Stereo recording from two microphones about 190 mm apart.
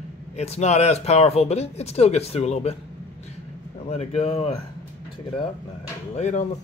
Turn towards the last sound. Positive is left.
turn(degrees=35)  # may be behind; listen again after turning